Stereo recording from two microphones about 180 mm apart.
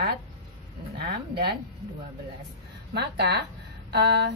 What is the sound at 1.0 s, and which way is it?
Speech, 60° right (ahead or behind).